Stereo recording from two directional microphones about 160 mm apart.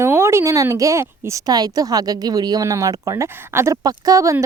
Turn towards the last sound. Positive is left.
turn(degrees=-20)  # may be behind; listen again after turning